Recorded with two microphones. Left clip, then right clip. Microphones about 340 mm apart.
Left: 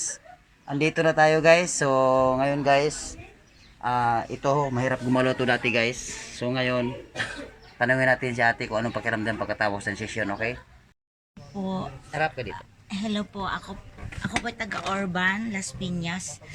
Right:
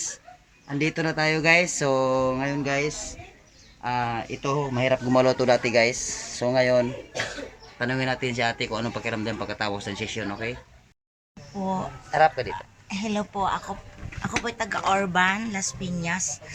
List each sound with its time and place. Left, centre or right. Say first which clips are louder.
0.8 s speech: left 5 dB; centre
3.8 s speech: left 3 dB; centre
7.8 s speech: left 5 dB; centre
12.1 s speech: right 7 dB; centre
12.9 s speech: right 3 dB; centre